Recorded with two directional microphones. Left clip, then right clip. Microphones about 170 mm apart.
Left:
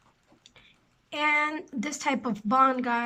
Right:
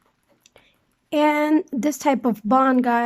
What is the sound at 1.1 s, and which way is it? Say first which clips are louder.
Speech: right 7 dB; 40° right (ahead or behind).